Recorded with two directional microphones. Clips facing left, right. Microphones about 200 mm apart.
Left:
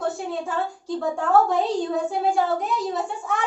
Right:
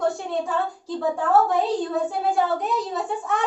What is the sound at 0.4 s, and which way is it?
A woman's voice, centre (ahead or behind).